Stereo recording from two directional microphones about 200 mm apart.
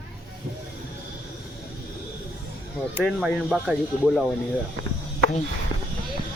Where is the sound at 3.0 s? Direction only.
Centre (ahead or behind).